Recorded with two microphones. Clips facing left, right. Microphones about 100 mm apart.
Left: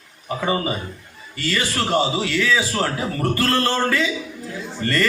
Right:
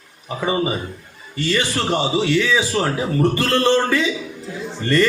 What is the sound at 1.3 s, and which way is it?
A man's voice, 25° right (ahead or behind).